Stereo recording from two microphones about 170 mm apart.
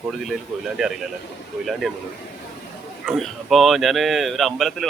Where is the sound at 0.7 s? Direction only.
Centre (ahead or behind).